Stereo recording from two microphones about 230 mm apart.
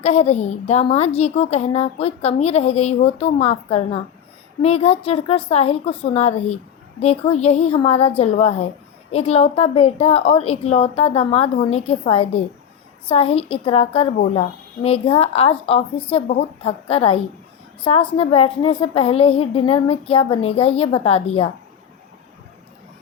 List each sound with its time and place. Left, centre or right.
0.0 s a woman's voice: left